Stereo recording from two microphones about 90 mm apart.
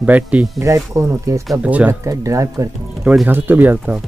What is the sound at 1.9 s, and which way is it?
Speech, 40° right (ahead or behind).